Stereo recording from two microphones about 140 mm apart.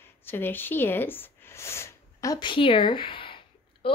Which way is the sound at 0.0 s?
15° left (ahead or behind).